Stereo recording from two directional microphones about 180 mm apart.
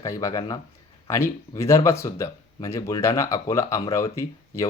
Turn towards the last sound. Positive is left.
turn(degrees=15)  # may be behind; listen again after turning